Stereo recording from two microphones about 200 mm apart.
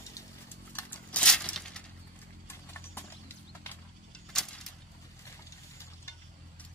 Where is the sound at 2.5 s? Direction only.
10° left (ahead or behind).